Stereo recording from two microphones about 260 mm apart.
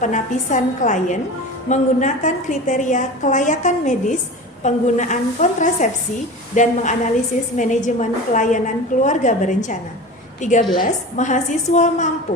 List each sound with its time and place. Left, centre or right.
0.0 s a woman's voice: left